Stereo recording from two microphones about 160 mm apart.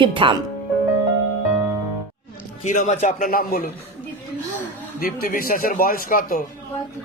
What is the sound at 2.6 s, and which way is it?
A man's voice, 50° left (ahead or behind).